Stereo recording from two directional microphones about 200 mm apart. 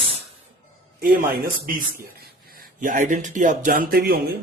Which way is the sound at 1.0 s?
45° right (ahead or behind).